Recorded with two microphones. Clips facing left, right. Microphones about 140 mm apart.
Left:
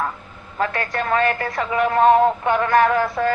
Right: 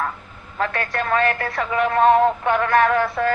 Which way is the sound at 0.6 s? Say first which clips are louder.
Left 1 dB; 25° left (ahead or behind).